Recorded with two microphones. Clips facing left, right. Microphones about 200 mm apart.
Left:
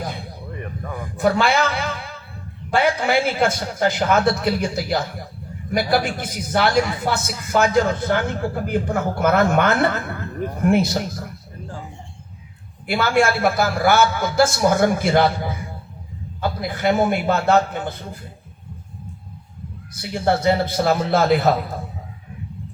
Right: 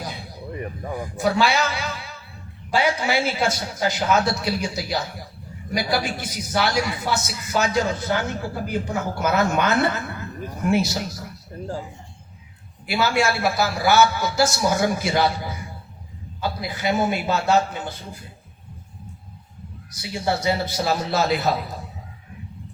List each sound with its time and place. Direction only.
0.6 s a sound: 25° right (ahead or behind)
1.2 s a man's voice: 55° left (ahead or behind)
12.9 s a man's voice: 55° left (ahead or behind)
19.9 s a man's voice: 55° left (ahead or behind)